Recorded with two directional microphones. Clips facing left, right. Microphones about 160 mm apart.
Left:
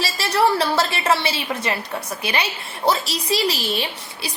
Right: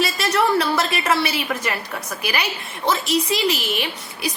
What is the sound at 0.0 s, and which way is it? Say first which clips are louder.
A woman's voice: even; 30° left (ahead or behind).